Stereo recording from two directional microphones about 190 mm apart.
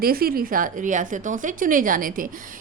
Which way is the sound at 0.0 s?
50° right (ahead or behind).